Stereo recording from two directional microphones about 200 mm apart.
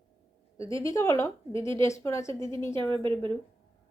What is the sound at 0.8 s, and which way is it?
Speech, 15° left (ahead or behind).